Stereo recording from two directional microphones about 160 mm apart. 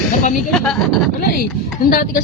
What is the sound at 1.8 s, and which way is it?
Speech, 65° left (ahead or behind).